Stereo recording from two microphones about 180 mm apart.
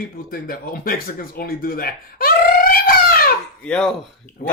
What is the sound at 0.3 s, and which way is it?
Speech, 55° left (ahead or behind).